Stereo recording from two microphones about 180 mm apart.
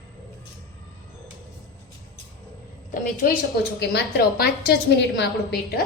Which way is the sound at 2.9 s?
50° left (ahead or behind).